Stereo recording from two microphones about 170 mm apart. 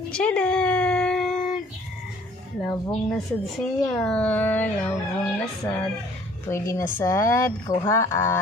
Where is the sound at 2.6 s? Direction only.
5° left (ahead or behind).